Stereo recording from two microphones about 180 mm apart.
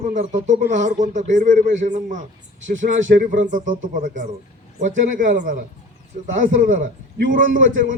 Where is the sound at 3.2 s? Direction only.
45° right (ahead or behind).